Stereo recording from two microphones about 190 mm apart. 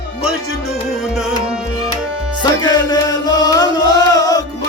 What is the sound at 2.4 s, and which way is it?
Music, 20° left (ahead or behind).